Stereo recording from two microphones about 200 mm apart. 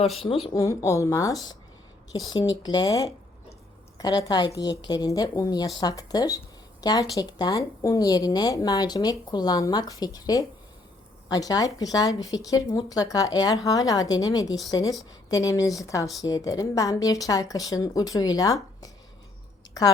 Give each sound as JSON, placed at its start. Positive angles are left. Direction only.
{"t": 0.4, "sound": "speech", "side_deg": 15}
{"t": 2.6, "sound": "a woman's voice", "side_deg": 20}